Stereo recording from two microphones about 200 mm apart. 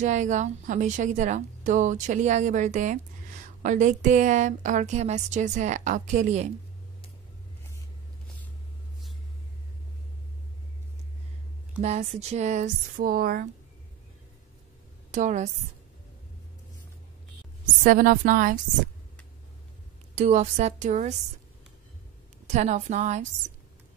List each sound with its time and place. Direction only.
0.0 s a woman's voice: 40° right (ahead or behind)
11.8 s a woman's voice: 35° right (ahead or behind)
15.0 s a woman's voice: 35° right (ahead or behind)
17.8 s a woman's voice: 45° right (ahead or behind)
20.2 s a woman's voice: 35° right (ahead or behind)
22.5 s a woman's voice: 35° right (ahead or behind)